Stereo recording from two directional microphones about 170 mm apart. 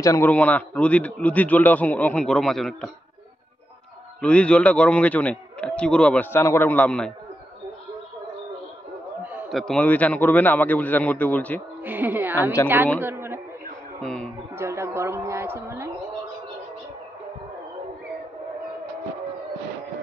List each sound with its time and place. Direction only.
0.0 s a man's voice: 15° left (ahead or behind)
4.2 s a man's voice: 5° left (ahead or behind)
9.2 s a sound: 10° right (ahead or behind)
9.6 s a man's voice: 5° left (ahead or behind)
11.8 s a woman's voice: 10° right (ahead or behind)
12.6 s a man's voice: 15° left (ahead or behind)
13.0 s a sound: 10° right (ahead or behind)
14.0 s a man's voice: 5° left (ahead or behind)
14.6 s a sound: 15° right (ahead or behind)